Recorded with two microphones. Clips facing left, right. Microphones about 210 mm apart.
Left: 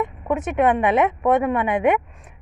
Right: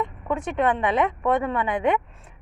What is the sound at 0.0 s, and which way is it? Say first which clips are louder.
Speech: left 4 dB; 20° left (ahead or behind).